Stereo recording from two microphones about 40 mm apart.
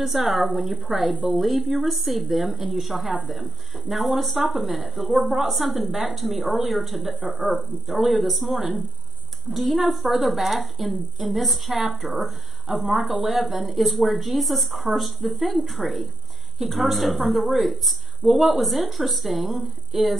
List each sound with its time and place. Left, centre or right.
0.0 s a woman's voice: centre
7.2 s speech: right
8.0 s a woman's voice: centre